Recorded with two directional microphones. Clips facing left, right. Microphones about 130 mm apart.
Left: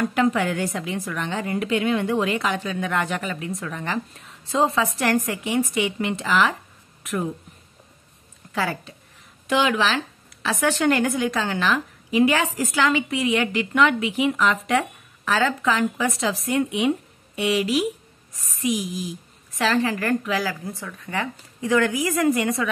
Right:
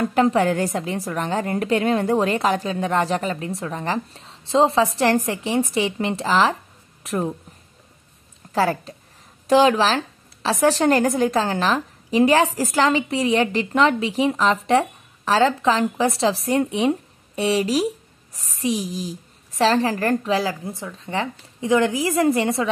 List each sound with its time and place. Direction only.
0.0 s a woman's voice: 35° right (ahead or behind)
7.0 s a sound: 35° right (ahead or behind)
8.5 s a woman's voice: 40° right (ahead or behind)